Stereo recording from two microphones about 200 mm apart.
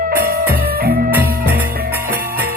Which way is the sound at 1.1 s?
10° right (ahead or behind).